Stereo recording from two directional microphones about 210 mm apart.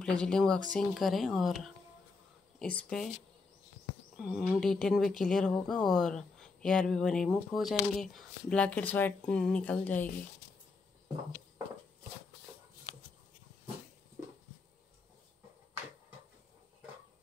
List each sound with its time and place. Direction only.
0.0 s speech: 5° left (ahead or behind)
4.2 s speech: 5° right (ahead or behind)